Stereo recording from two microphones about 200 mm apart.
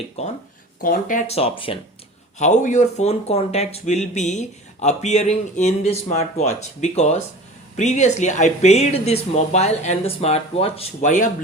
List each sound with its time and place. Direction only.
0.2 s speech: 30° left (ahead or behind)
0.8 s speech: 45° left (ahead or behind); by 1.8 s 25° left (ahead or behind)
2.4 s speech: 35° left (ahead or behind)